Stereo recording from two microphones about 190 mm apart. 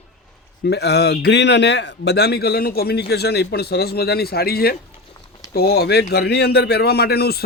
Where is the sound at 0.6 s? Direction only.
60° left (ahead or behind).